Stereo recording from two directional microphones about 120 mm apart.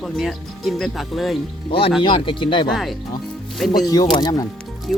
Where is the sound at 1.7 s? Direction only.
50° left (ahead or behind).